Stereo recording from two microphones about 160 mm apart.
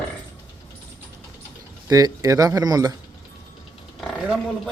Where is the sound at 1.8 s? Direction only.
20° right (ahead or behind).